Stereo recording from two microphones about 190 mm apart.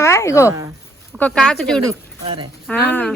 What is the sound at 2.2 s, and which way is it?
Speech, 25° right (ahead or behind).